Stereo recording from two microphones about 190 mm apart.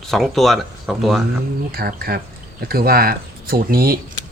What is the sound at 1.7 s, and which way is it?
Speech, 55° right (ahead or behind).